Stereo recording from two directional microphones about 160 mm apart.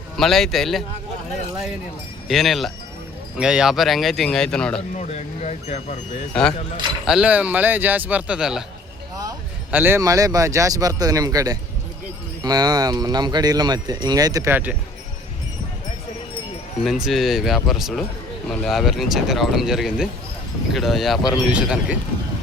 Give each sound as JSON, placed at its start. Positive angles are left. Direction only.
{"t": 0.2, "sound": "speech", "side_deg": 0}
{"t": 2.2, "sound": "speech", "side_deg": 0}
{"t": 4.9, "sound": "speech", "side_deg": 45}
{"t": 7.0, "sound": "speech", "side_deg": -5}
{"t": 9.7, "sound": "speech", "side_deg": -15}
{"t": 16.8, "sound": "speech", "side_deg": 0}